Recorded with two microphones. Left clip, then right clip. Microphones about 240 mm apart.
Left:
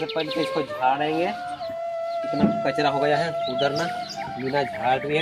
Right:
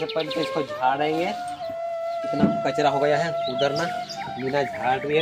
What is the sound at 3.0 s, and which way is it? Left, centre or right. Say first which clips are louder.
Speech: even; centre.